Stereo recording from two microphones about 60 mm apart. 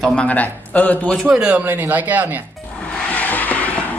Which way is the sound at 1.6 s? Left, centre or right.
Right.